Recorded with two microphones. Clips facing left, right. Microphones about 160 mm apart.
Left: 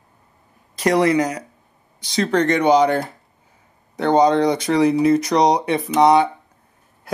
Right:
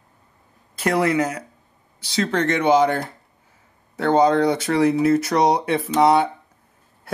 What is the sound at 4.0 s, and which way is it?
Speech, 15° left (ahead or behind).